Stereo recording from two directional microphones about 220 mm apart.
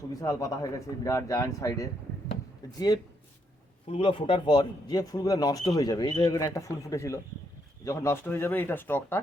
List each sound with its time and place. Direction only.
0.1 s speech: 15° left (ahead or behind)
3.8 s speech: 25° left (ahead or behind); by 9.3 s 10° left (ahead or behind)